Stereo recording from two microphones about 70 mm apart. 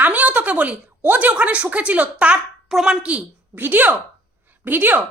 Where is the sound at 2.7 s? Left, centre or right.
Centre.